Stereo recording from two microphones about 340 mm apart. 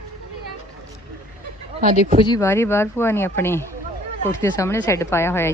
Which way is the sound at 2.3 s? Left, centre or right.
Centre.